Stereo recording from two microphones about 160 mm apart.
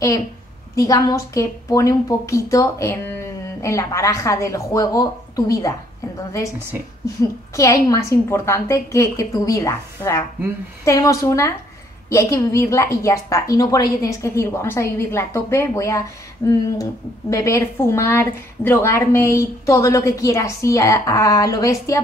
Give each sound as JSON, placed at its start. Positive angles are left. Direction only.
{"t": 0.7, "sound": "a woman's voice", "side_deg": 20}
{"t": 7.5, "sound": "a woman's voice", "side_deg": 20}